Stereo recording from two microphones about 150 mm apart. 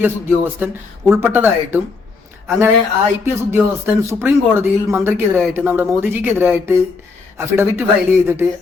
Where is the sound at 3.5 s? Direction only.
15° right (ahead or behind).